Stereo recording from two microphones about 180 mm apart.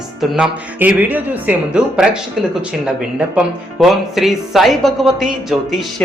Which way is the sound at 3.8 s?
Centre (ahead or behind).